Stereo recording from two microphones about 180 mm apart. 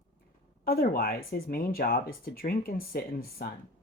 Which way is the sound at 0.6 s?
55° left (ahead or behind).